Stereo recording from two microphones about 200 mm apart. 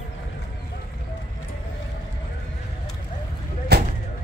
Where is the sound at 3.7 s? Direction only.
55° right (ahead or behind).